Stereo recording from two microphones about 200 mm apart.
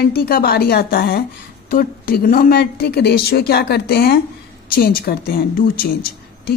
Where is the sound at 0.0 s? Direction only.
50° left (ahead or behind).